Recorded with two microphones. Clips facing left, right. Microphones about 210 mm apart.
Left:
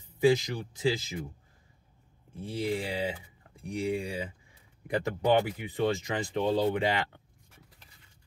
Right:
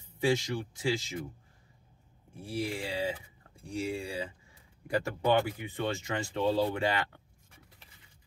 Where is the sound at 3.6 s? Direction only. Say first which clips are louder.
Left 3 dB; 20° left (ahead or behind).